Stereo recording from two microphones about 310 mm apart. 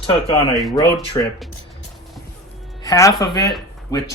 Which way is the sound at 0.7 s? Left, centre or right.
Centre.